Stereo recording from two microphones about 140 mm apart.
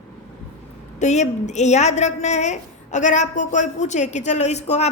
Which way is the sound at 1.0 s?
55° left (ahead or behind).